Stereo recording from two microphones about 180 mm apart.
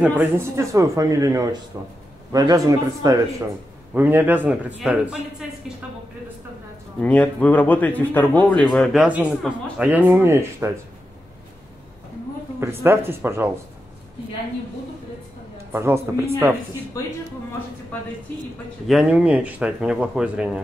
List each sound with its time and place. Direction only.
0.0 s a man's voice: 15° right (ahead or behind)
7.0 s speech: 5° left (ahead or behind)
9.0 s speech: 5° right (ahead or behind)
12.5 s speech: 15° right (ahead or behind)
15.5 s a sound: 15° right (ahead or behind)
17.0 s speech: 20° left (ahead or behind)
18.9 s speech: 5° right (ahead or behind)